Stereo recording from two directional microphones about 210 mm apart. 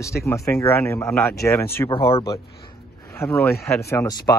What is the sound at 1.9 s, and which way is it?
Speech, 15° left (ahead or behind).